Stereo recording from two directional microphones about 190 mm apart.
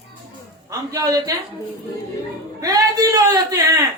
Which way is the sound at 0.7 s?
20° right (ahead or behind).